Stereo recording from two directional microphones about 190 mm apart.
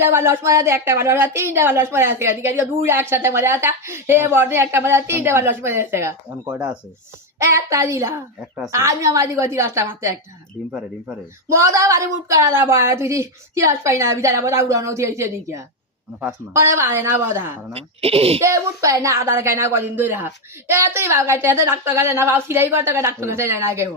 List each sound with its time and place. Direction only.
0.0 s a woman's voice: 15° right (ahead or behind)
6.4 s chopping: 20° right (ahead or behind)
7.3 s a woman's voice: 15° right (ahead or behind)
11.4 s a woman's voice: 15° right (ahead or behind)
17.7 s speech: 30° right (ahead or behind)
18.4 s a woman's voice: 15° right (ahead or behind)